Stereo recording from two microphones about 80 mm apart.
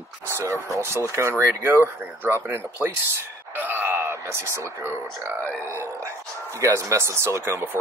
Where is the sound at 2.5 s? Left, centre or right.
Right.